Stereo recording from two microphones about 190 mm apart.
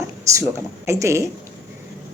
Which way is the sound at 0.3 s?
15° right (ahead or behind).